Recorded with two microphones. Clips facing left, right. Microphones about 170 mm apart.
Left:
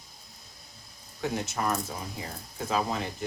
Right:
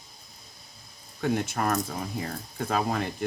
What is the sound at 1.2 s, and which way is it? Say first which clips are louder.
Speech: right 4 dB; 55° right (ahead or behind).